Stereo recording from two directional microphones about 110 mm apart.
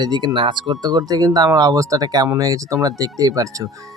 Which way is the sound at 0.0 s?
40° right (ahead or behind).